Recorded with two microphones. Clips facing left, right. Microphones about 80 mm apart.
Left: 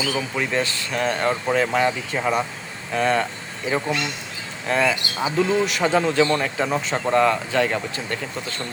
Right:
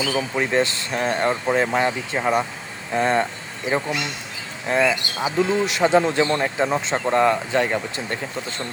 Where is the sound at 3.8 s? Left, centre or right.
Centre.